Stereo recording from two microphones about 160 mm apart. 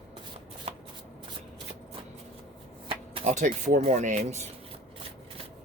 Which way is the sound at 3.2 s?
50° right (ahead or behind).